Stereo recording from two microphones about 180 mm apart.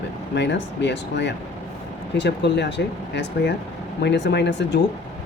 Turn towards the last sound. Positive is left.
turn(degrees=70)  # may be behind; listen again after turning